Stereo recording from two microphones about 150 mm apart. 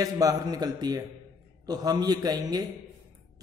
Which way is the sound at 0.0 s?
25° right (ahead or behind).